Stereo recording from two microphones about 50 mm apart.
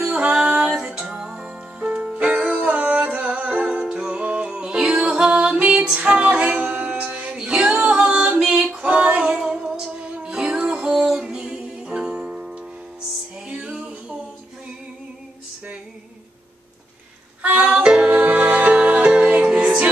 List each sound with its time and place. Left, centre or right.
0.0 s music: centre
0.7 s music: centre
1.0 s music: centre
7.3 s female singing: centre
8.1 s singing: right
8.8 s music: right
10.1 s a capella: centre
13.5 s music: centre
17.5 s music: centre
18.0 s music: right